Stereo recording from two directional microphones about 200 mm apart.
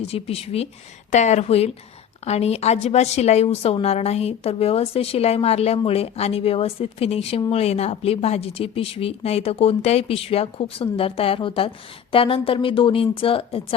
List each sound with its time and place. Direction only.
0.0 s a woman's voice: 30° left (ahead or behind)